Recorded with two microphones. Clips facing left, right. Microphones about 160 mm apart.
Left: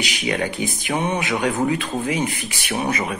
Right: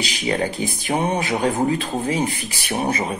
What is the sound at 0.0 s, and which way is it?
Speech, 35° right (ahead or behind).